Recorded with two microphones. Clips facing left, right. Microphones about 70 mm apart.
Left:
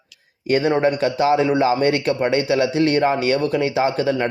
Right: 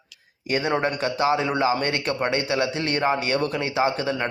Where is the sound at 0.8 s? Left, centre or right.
Right.